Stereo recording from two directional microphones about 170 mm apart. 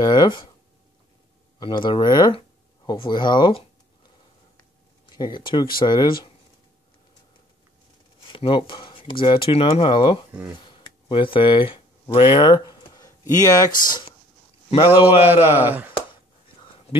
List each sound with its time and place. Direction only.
0.0 s speech: 25° left (ahead or behind)
1.6 s speech: 25° left (ahead or behind)
4.6 s a sound: 25° left (ahead or behind)
5.8 s speech: 25° left (ahead or behind)
8.2 s speech: 30° left (ahead or behind)
12.9 s a sound: 20° left (ahead or behind)
14.9 s speech: 10° right (ahead or behind)